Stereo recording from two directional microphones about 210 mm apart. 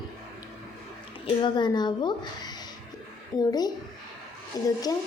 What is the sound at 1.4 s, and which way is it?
Speech, 20° left (ahead or behind).